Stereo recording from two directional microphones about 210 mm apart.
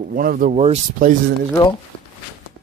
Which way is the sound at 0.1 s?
45° right (ahead or behind).